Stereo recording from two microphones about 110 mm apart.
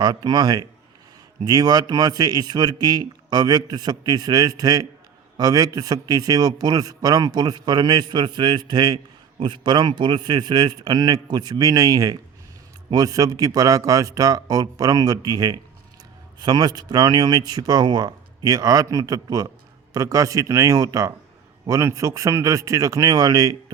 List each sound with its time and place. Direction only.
0.0 s a man's voice: 40° right (ahead or behind)